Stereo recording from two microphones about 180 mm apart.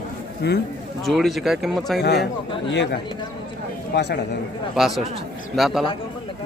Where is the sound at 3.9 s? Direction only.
70° left (ahead or behind).